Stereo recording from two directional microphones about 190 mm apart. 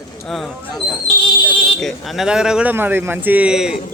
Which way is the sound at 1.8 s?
Centre (ahead or behind).